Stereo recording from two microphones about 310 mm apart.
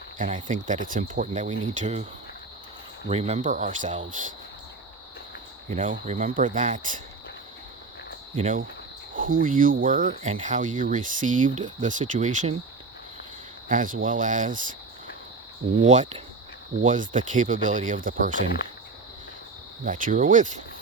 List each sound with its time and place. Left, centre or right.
0.2 s speech: right
3.1 s speech: centre
5.7 s speech: right
8.4 s speech: right
9.1 s cricket: right
9.8 s speech: right
13.7 s speech: right
15.8 s speech: right
19.8 s speech: right